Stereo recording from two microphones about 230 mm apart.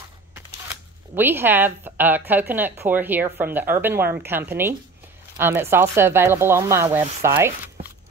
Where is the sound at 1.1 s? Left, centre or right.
Centre.